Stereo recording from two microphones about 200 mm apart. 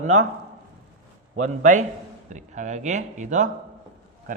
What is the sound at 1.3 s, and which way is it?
A man's voice, 40° right (ahead or behind).